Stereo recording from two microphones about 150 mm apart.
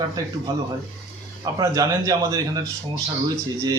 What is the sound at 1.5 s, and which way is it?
Speech, 25° right (ahead or behind).